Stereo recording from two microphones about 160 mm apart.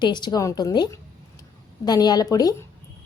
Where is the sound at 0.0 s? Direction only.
30° left (ahead or behind).